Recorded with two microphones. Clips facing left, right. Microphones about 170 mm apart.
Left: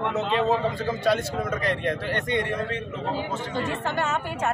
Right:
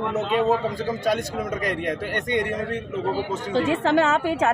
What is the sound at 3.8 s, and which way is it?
Speech, 90° right.